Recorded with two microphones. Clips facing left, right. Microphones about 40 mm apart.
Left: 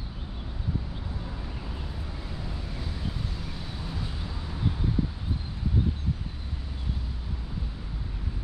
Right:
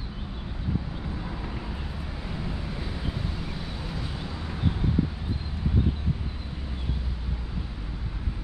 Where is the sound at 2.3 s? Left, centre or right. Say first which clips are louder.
Right 7 dB; right.